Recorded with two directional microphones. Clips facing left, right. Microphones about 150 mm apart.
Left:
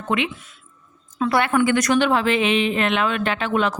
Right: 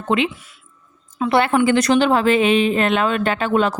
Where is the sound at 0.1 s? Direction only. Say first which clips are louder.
Right 4 dB; 30° right (ahead or behind).